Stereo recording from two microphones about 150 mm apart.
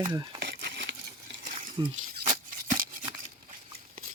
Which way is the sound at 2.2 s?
65° right (ahead or behind).